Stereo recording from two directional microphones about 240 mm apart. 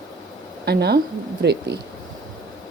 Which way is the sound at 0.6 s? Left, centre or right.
Right.